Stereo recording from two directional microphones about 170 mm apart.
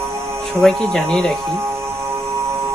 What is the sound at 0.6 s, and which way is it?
Speech, 5° left (ahead or behind).